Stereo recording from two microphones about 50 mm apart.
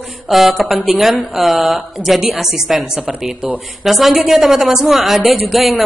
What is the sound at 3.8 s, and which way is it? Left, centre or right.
A woman's voice, centre.